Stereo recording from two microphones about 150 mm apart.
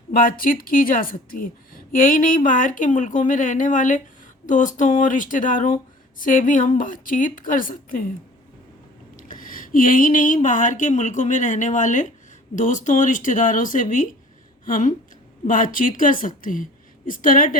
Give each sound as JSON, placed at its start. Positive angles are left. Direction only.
{"t": 0.1, "sound": "speech", "side_deg": 70}
{"t": 9.1, "sound": "speech", "side_deg": 65}